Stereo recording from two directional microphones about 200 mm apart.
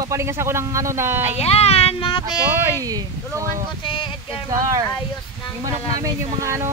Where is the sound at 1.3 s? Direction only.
30° left (ahead or behind).